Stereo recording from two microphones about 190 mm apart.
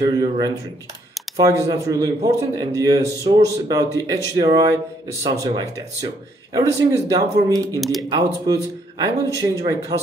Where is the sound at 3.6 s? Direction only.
20° right (ahead or behind).